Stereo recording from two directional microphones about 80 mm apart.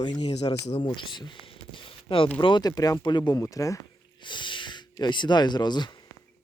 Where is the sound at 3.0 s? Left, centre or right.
Left.